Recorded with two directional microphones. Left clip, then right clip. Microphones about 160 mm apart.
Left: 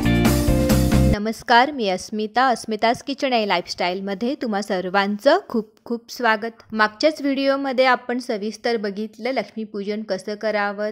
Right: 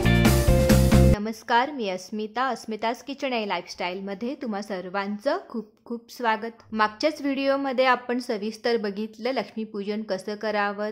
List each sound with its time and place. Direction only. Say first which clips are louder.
0.0 s music: left 2 dB; centre (ahead or behind)
1.2 s a woman's voice: left 7 dB; 30° left (ahead or behind)
6.1 s a woman's voice: left 5 dB; 30° left (ahead or behind)